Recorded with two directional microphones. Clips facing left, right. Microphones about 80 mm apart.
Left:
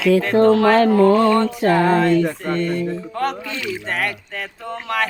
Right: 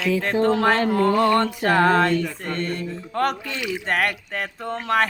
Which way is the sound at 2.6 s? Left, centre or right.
Right.